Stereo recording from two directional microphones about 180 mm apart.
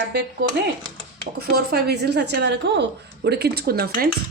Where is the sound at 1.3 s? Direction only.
60° right (ahead or behind).